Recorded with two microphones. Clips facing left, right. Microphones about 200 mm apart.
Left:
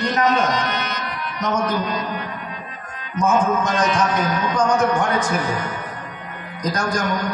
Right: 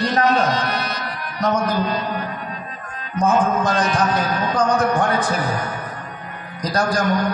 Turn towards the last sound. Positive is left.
turn(degrees=-35)  # may be behind; listen again after turning